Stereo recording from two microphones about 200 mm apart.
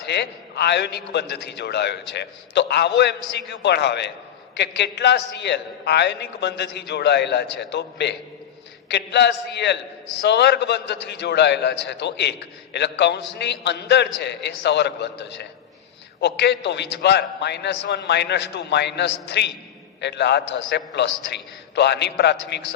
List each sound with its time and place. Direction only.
0.0 s a man's voice: 60° left (ahead or behind)